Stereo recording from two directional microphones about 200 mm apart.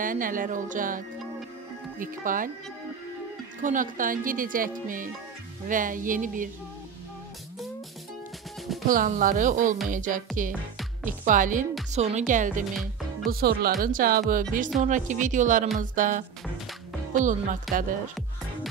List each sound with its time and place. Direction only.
0.0 s speech: 45° right (ahead or behind)
3.6 s speech: 40° right (ahead or behind)
8.8 s speech: 40° right (ahead or behind)